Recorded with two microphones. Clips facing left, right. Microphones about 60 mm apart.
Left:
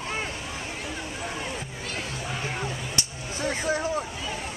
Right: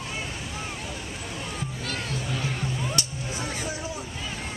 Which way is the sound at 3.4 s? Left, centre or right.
Left.